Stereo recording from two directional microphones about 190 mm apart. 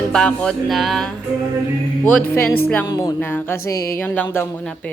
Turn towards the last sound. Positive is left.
turn(degrees=10)  # may be behind; listen again after turning